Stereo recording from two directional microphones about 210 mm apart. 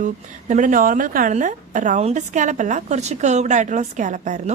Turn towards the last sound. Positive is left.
turn(degrees=-35)  # may be behind; listen again after turning